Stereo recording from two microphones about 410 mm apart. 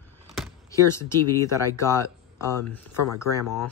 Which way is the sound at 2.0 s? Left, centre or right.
Centre.